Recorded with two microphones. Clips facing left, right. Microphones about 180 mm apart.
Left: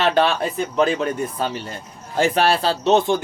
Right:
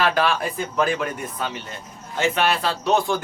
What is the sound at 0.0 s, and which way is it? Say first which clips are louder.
Speech: left 3 dB; 25° left (ahead or behind).